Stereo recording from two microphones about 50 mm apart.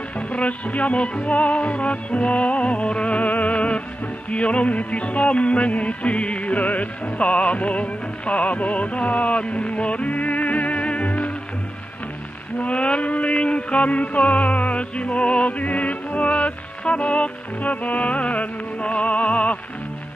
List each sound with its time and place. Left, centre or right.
0.3 s music: left
12.5 s music: left